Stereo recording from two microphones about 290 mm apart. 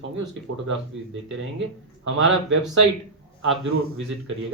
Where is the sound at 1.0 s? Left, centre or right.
Right.